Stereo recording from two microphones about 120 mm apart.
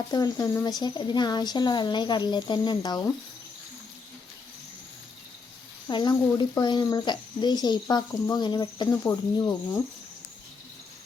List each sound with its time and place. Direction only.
0.1 s speech: 30° left (ahead or behind)
5.9 s speech: 40° left (ahead or behind)
9.0 s speech: 25° left (ahead or behind)